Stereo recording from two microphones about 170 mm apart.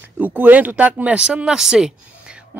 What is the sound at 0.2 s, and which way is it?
Speech, 10° right (ahead or behind).